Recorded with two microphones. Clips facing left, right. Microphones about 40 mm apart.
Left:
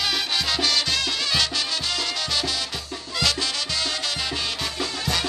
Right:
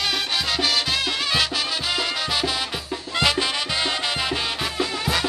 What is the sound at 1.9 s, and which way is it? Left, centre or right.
Salsa music, centre.